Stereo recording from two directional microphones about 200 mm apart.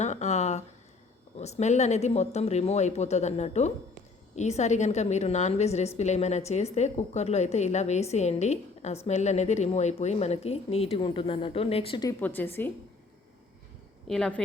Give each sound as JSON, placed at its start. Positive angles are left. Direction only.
{"t": 0.0, "sound": "a sound", "side_deg": 35}
{"t": 1.4, "sound": "speech", "side_deg": 35}
{"t": 12.2, "sound": "a woman's voice", "side_deg": 10}
{"t": 14.1, "sound": "a woman's voice", "side_deg": 5}